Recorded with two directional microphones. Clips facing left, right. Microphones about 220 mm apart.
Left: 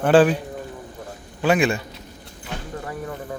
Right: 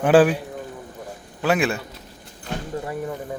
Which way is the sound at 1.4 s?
Centre (ahead or behind).